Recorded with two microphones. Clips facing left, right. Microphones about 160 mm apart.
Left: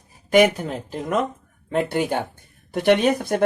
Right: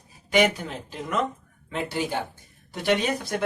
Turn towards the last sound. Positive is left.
turn(degrees=55)  # may be behind; listen again after turning